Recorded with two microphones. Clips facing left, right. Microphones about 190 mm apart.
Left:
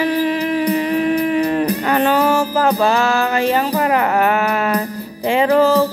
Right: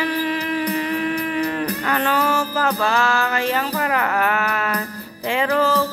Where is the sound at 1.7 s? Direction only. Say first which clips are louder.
Left 6 dB; 20° left (ahead or behind).